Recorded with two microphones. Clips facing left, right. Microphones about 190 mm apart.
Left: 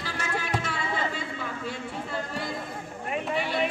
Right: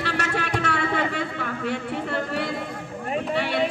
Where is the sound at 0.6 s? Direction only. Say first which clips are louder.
Right 6 dB; 65° right (ahead or behind).